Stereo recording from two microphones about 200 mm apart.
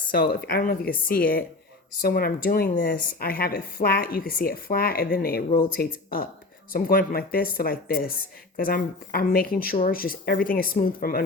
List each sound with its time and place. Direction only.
0.1 s speech: 50° left (ahead or behind)